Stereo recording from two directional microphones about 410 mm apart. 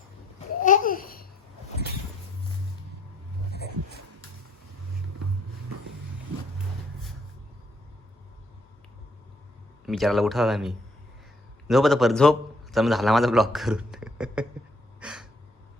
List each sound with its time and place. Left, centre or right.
0.3 s babbling: centre
9.8 s a man's voice: centre
15.0 s gasp: centre